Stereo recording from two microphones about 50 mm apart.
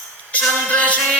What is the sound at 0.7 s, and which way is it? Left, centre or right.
Music, left.